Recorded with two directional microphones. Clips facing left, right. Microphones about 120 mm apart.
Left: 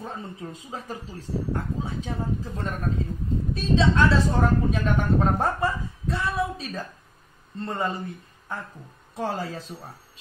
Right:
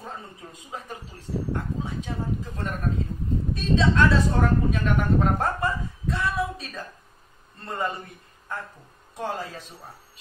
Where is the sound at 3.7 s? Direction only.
25° left (ahead or behind).